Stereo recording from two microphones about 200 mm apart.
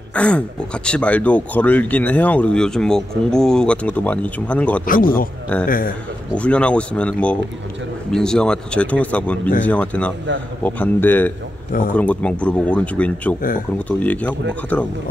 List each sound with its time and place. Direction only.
0.1 s speech: 5° left (ahead or behind)
4.8 s speech: 45° left (ahead or behind)
6.3 s speech: 5° left (ahead or behind)